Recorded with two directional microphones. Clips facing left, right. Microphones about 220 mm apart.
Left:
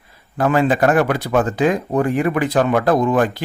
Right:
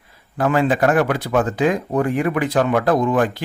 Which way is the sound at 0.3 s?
40° left (ahead or behind).